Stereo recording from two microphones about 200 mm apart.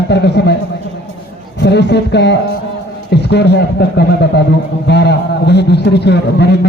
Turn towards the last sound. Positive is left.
turn(degrees=55)  # may be behind; listen again after turning